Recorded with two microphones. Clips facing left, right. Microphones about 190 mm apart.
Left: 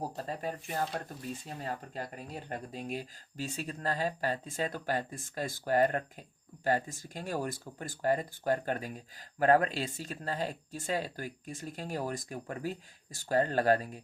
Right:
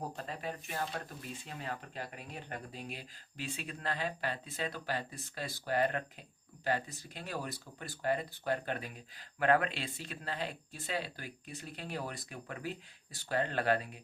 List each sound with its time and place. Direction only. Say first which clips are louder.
0.0 s speech: left 4 dB; 40° left (ahead or behind)